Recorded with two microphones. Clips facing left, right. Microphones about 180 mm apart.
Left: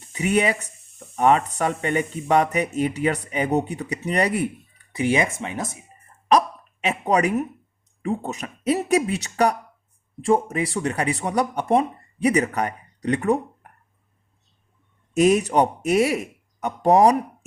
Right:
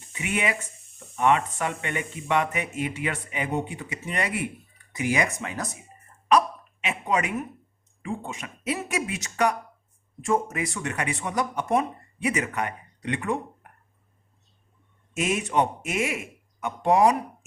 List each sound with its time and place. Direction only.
0.1 s speech: 35° left (ahead or behind)
6.8 s speech: 40° left (ahead or behind)
15.1 s speech: 40° left (ahead or behind)